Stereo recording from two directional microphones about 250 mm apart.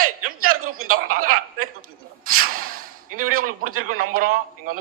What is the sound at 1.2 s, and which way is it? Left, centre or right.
Speech, right.